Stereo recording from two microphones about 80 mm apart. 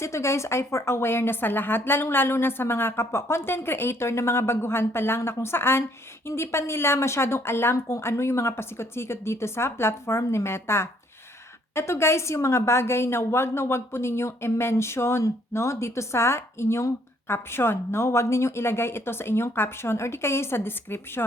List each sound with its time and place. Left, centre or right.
0.0 s a woman's voice: left